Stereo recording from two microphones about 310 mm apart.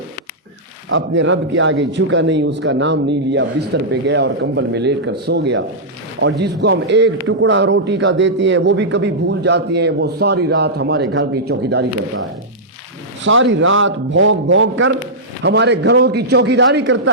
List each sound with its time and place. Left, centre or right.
0.9 s a man's voice: right
13.2 s a man's voice: right